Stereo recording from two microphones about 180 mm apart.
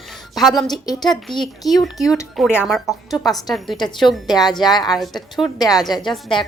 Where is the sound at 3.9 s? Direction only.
Centre (ahead or behind).